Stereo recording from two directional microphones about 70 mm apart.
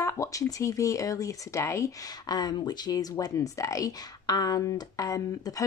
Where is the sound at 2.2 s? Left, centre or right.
Left.